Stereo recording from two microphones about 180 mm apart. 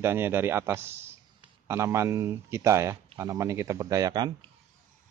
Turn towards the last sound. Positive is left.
turn(degrees=-25)  # may be behind; listen again after turning